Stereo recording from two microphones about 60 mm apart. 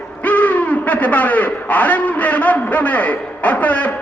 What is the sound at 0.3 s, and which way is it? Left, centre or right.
Speech, left.